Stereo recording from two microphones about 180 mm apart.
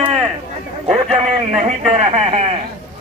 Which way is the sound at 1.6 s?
40° right (ahead or behind).